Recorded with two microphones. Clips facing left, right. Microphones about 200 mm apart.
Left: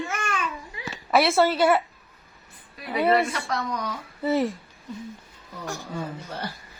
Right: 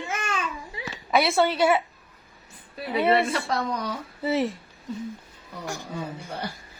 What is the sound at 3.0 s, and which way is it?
Speech, 30° right (ahead or behind).